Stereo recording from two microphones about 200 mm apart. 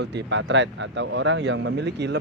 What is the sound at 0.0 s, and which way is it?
Speech, 60° right (ahead or behind).